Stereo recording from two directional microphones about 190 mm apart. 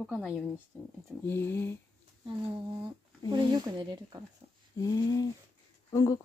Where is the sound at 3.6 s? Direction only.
25° right (ahead or behind).